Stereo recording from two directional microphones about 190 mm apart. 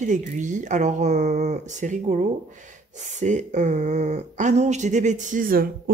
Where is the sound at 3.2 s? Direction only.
40° right (ahead or behind).